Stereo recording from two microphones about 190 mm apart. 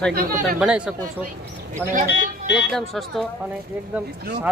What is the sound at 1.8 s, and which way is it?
Speech, 5° left (ahead or behind).